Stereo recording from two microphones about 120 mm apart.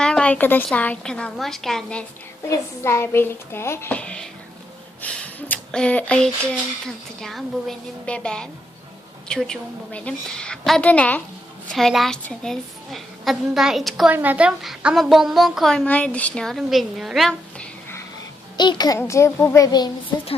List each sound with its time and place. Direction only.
0.0 s speech: 5° left (ahead or behind)
2.8 s a child's voice: 20° left (ahead or behind)
3.9 s a woman's voice: 10° left (ahead or behind)
14.1 s a woman's voice: 15° right (ahead or behind)
18.5 s a child's voice: 40° left (ahead or behind)
18.9 s a child's voice: 25° left (ahead or behind)